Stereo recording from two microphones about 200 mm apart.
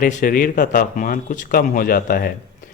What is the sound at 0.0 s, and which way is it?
Speech, 40° left (ahead or behind).